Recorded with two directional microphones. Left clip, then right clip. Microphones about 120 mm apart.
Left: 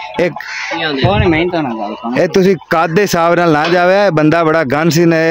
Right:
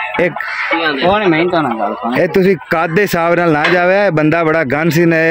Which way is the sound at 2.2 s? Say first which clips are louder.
Left 1 dB; 10° left (ahead or behind).